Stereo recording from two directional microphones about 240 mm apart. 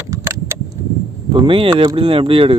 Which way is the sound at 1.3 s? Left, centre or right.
Right.